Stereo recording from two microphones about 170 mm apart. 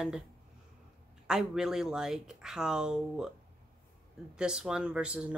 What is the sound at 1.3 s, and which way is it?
Speech, 5° right (ahead or behind).